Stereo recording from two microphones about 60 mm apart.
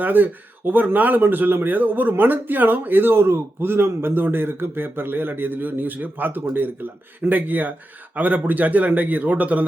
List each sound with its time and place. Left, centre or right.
0.0 s a man's voice: right